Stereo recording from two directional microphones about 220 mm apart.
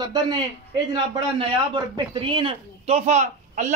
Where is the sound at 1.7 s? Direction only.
20° right (ahead or behind).